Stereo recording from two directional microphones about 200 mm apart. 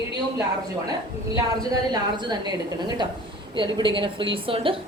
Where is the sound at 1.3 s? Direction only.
20° right (ahead or behind).